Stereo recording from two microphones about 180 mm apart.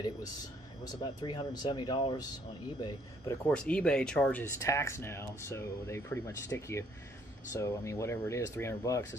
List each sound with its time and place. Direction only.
0.8 s speech: 25° left (ahead or behind)
3.4 s speech: 5° left (ahead or behind)